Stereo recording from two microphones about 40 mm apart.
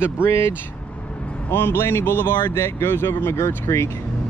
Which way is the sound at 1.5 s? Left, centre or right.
Left.